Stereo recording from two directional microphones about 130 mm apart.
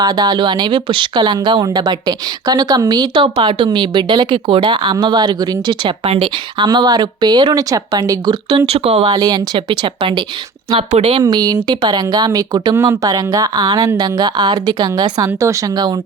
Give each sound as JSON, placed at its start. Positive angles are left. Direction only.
{"t": 0.0, "sound": "speech", "side_deg": -35}
{"t": 9.0, "sound": "a woman's voice", "side_deg": -30}
{"t": 11.2, "sound": "speech", "side_deg": -30}